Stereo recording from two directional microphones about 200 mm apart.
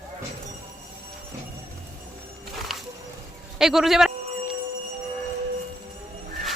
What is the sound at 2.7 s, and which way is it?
Music, centre (ahead or behind).